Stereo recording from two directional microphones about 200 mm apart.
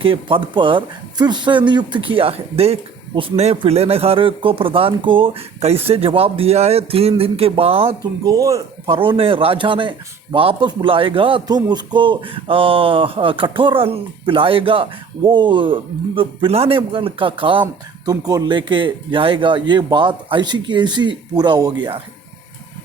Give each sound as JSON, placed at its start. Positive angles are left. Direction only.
{"t": 0.0, "sound": "a man's voice", "side_deg": -25}
{"t": 8.2, "sound": "speech", "side_deg": -15}
{"t": 8.9, "sound": "a man's voice", "side_deg": -25}